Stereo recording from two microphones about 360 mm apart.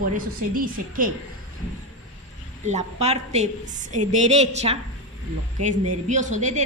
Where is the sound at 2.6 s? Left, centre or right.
Centre.